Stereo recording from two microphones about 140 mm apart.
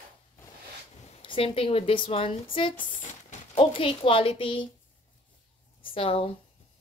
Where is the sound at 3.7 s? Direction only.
40° left (ahead or behind).